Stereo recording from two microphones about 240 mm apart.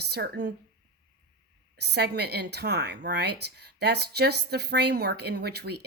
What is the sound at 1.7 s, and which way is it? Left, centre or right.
Speech, right.